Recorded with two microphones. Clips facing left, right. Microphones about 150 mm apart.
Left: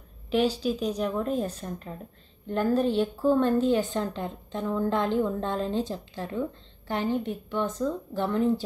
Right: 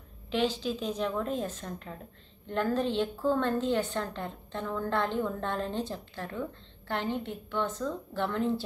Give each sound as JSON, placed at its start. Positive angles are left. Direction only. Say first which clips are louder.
{"t": 0.3, "sound": "a woman's voice", "louder": "left 4 dB", "side_deg": 10}